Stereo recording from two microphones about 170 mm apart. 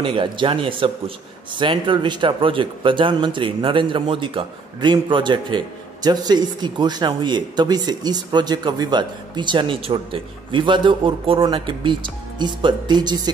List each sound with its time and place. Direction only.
0.0 s a man's voice: 30° right (ahead or behind)